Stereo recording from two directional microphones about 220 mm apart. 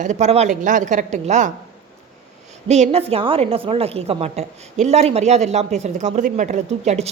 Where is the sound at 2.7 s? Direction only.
30° right (ahead or behind).